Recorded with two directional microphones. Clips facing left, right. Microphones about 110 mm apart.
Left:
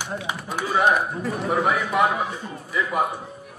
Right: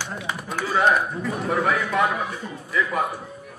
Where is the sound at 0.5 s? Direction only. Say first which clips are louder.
Even; 15° left (ahead or behind).